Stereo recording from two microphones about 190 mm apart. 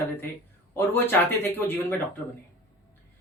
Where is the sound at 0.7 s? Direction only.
10° left (ahead or behind).